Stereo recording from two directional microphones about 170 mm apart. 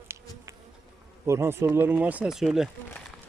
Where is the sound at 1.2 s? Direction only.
15° right (ahead or behind).